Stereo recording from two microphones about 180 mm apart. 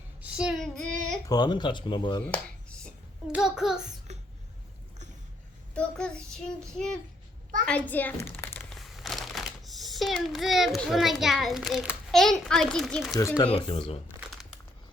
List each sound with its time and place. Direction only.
0.2 s speech: 5° right (ahead or behind)
1.3 s speech: 25° left (ahead or behind)
2.2 s a sound: 5° left (ahead or behind)
3.3 s child singing: 5° right (ahead or behind)
5.7 s child singing: 5° left (ahead or behind)
7.7 s a child's voice: 10° left (ahead or behind)
8.7 s a child's voice: centre (ahead or behind)
13.1 s speech: 20° left (ahead or behind)